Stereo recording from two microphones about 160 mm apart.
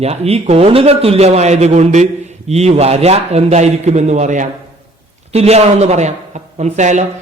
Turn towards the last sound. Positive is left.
turn(degrees=-50)  # may be behind; listen again after turning